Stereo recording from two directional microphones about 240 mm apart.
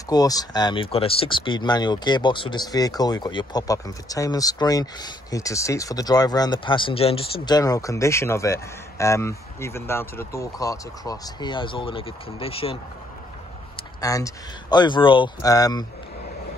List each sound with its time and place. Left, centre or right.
0.1 s speech: centre
14.0 s speech: centre